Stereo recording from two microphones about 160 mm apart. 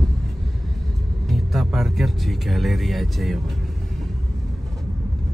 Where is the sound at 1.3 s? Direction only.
Centre (ahead or behind).